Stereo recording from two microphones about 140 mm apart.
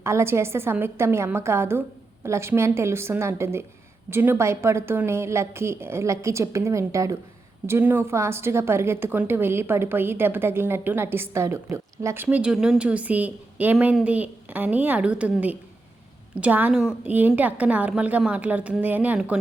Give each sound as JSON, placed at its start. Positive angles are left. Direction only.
{"t": 0.0, "sound": "a woman's voice", "side_deg": -20}